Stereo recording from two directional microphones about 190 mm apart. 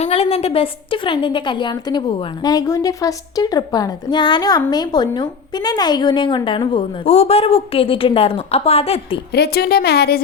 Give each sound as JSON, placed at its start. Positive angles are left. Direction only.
{"t": 0.0, "sound": "a woman's voice", "side_deg": 30}
{"t": 9.3, "sound": "a woman's voice", "side_deg": 55}